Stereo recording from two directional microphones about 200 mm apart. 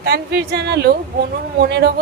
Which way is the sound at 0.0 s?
55° right (ahead or behind).